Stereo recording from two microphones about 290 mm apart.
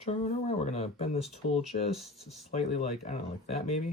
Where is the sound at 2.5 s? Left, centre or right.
Left.